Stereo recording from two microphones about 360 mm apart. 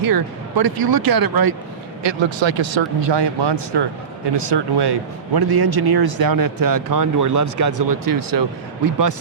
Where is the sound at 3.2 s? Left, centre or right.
Right.